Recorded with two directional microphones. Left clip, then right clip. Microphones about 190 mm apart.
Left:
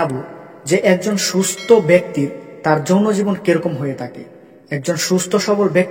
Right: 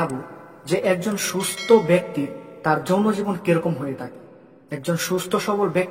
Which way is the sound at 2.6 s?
30° left (ahead or behind).